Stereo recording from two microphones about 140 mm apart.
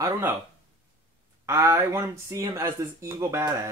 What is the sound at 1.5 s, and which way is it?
Speech, 20° right (ahead or behind).